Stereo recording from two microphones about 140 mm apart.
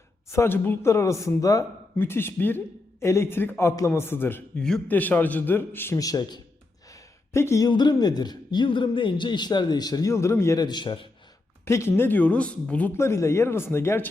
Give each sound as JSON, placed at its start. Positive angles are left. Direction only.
{"t": 0.3, "sound": "speech", "side_deg": 15}
{"t": 6.9, "sound": "a sound", "side_deg": 20}
{"t": 7.7, "sound": "a man's voice", "side_deg": 30}
{"t": 11.6, "sound": "speech", "side_deg": 20}